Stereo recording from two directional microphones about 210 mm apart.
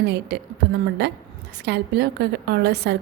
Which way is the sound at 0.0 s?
50° right (ahead or behind).